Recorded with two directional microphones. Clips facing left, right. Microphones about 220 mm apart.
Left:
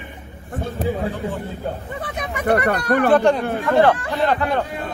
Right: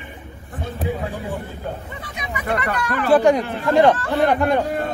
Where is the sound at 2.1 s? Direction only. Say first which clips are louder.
Left 5 dB; 50° left (ahead or behind).